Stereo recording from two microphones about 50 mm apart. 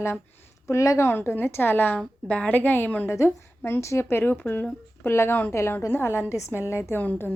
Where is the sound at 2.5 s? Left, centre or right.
Left.